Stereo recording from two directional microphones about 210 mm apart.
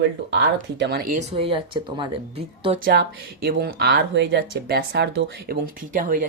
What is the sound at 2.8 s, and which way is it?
Speech, 50° right (ahead or behind).